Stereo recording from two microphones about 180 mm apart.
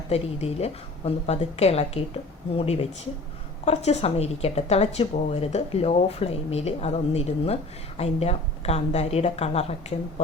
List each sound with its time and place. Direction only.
0.1 s speech: 35° left (ahead or behind)